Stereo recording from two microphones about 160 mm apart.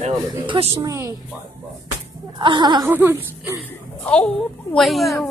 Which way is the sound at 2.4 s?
30° right (ahead or behind).